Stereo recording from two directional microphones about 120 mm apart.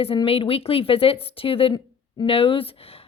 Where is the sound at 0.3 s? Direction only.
55° left (ahead or behind).